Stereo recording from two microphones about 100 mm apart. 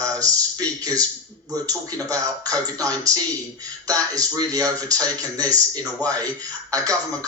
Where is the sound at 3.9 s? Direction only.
35° right (ahead or behind).